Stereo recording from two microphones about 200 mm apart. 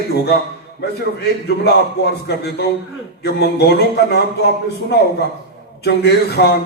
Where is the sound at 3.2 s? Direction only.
55° left (ahead or behind).